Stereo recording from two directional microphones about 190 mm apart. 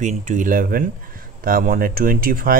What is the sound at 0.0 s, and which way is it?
Speech, 40° right (ahead or behind).